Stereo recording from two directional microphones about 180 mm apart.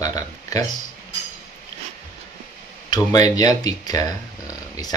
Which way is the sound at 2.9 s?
20° left (ahead or behind).